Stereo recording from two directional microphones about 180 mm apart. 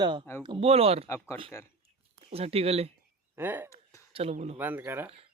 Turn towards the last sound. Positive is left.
turn(degrees=-10)  # may be behind; listen again after turning